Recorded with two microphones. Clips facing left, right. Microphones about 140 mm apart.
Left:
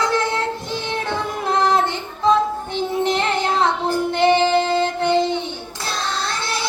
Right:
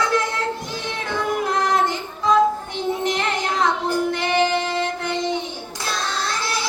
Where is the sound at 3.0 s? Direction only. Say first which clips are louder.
Left 3 dB; 30° left (ahead or behind).